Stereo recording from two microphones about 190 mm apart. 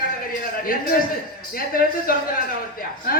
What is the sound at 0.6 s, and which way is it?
A man's voice, 50° left (ahead or behind).